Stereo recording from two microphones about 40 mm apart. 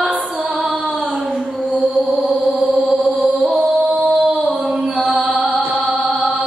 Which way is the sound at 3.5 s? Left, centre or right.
Right.